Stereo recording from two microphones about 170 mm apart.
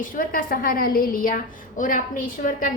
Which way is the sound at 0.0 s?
55° left (ahead or behind).